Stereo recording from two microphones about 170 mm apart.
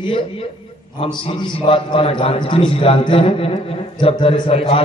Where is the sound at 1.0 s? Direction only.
30° left (ahead or behind).